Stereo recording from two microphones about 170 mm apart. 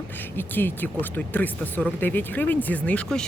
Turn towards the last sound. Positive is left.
turn(degrees=5)  # may be behind; listen again after turning